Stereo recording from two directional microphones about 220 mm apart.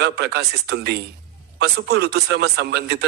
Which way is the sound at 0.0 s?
45° right (ahead or behind).